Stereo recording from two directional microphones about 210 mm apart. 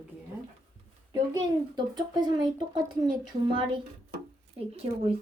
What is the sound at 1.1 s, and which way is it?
Speech, 20° right (ahead or behind).